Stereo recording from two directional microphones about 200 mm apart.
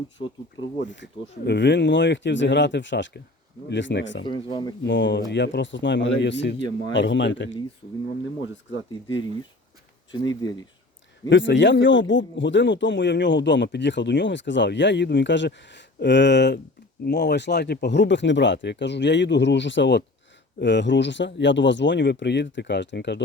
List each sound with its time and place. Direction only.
0.9 s speech: 65° left (ahead or behind)
4.2 s speech: 25° left (ahead or behind)
4.8 s speech: 65° left (ahead or behind)
10.1 s speech: 20° left (ahead or behind)
11.3 s speech: 65° left (ahead or behind)